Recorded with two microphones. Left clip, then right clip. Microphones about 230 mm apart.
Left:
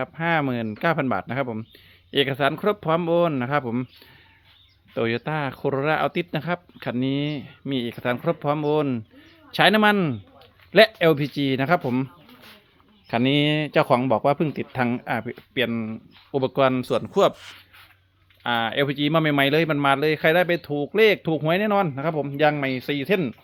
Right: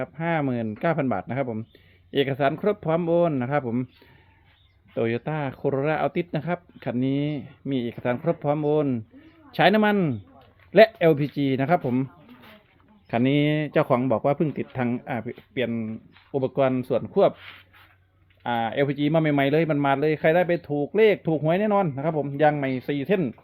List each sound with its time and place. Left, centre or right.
0.0 s speech: centre
4.9 s speech: centre
13.1 s speech: centre
17.3 s speech: centre
18.4 s speech: centre